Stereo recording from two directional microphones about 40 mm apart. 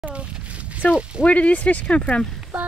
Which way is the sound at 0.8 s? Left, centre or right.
Left.